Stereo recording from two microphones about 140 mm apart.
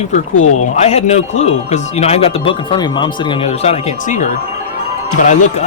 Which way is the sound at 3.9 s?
65° left (ahead or behind).